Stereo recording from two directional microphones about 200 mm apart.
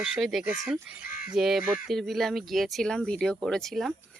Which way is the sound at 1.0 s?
45° left (ahead or behind).